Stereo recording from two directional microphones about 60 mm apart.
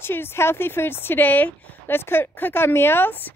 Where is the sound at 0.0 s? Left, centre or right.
Left.